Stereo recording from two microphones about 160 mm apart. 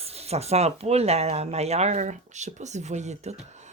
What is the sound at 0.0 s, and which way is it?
Speech, 40° right (ahead or behind).